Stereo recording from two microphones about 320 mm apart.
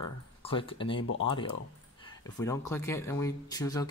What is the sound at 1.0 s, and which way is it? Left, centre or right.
Speech, left.